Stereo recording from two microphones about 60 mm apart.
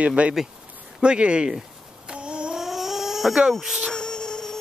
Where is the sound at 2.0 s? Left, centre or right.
Centre.